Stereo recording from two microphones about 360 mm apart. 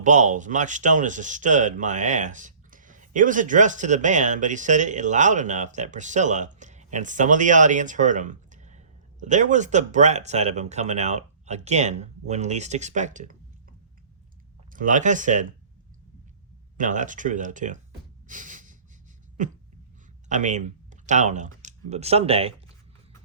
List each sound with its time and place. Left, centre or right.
0.0 s speech: centre
16.7 s speech: right
18.3 s snort: right
19.4 s speech: right